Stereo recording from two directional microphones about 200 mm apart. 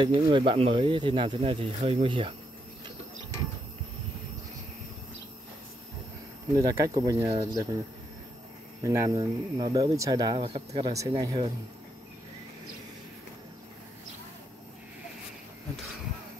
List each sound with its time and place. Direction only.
0.0 s speech: 25° right (ahead or behind)
6.5 s speech: 15° right (ahead or behind)
8.8 s speech: 15° right (ahead or behind)